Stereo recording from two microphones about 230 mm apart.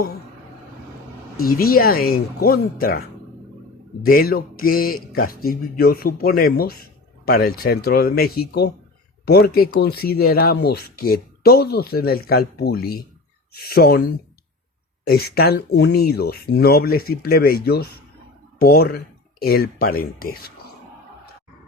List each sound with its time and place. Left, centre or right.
1.4 s speech: left
4.0 s speech: left